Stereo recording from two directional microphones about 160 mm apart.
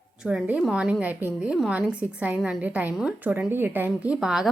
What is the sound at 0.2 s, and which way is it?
A woman's voice, 5° right (ahead or behind).